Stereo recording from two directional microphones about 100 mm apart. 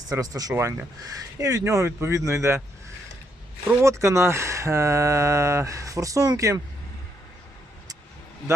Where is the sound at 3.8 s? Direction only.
30° right (ahead or behind).